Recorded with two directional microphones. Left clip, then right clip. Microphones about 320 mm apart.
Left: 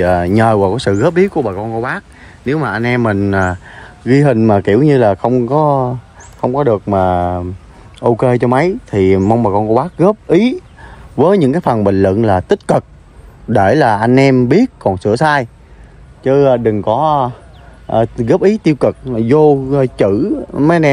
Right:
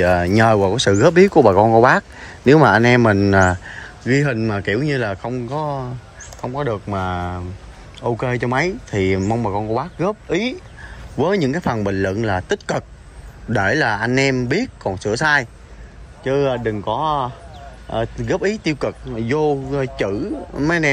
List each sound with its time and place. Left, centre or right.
0.0 s speech: centre